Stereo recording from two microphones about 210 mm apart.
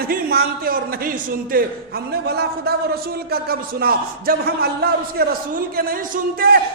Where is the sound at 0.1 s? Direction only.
45° right (ahead or behind).